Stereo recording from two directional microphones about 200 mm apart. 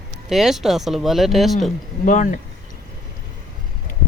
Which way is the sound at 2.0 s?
40° left (ahead or behind).